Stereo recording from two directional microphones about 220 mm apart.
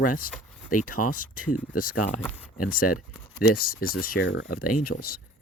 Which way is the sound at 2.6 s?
40° left (ahead or behind).